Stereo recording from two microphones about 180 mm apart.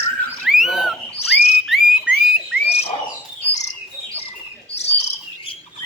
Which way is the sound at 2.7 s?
35° left (ahead or behind).